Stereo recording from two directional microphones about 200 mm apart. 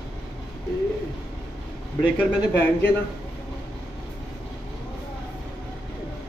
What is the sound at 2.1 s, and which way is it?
Speech, 5° left (ahead or behind).